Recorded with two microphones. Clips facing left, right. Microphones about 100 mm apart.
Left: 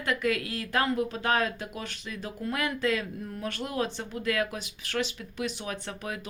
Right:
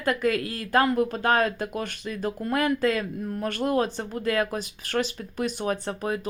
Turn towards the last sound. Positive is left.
turn(degrees=-40)  # may be behind; listen again after turning